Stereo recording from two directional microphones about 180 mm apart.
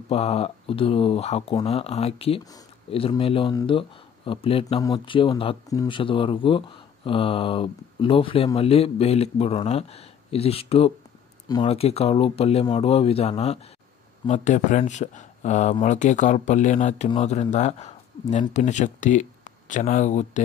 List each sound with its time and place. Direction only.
0.1 s speech: 35° left (ahead or behind)